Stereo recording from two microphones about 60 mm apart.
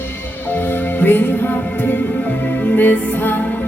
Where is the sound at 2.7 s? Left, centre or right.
Left.